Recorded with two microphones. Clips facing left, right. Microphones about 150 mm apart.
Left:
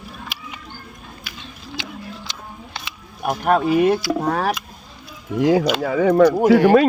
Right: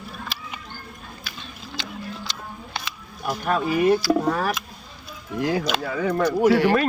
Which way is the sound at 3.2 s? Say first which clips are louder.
Left 6 dB; 55° left (ahead or behind).